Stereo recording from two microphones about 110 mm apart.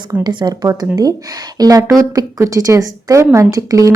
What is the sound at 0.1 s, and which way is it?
A woman's voice, 40° right (ahead or behind).